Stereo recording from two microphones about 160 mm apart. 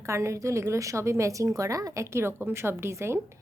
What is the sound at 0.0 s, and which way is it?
A woman's voice, 20° right (ahead or behind).